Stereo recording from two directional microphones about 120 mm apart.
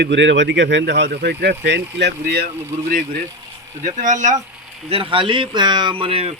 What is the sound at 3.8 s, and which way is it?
Speech, 90° right.